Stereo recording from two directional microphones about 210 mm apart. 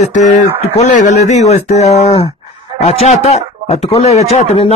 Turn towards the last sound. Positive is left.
turn(degrees=30)  # may be behind; listen again after turning